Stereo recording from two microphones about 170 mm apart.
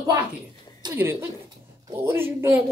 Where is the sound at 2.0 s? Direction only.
15° right (ahead or behind).